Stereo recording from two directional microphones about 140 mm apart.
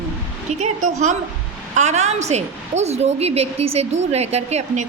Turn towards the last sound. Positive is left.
turn(degrees=-55)  # may be behind; listen again after turning